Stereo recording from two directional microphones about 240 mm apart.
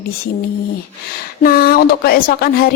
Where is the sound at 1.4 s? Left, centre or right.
Left.